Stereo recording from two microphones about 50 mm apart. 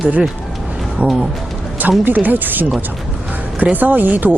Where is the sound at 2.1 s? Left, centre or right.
Right.